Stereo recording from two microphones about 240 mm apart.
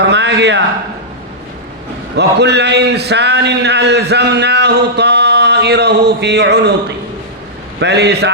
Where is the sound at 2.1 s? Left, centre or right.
Right.